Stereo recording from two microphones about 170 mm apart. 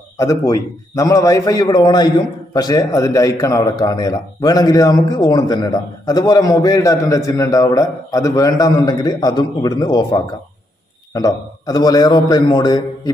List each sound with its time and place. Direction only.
0.2 s a man's voice: 20° left (ahead or behind)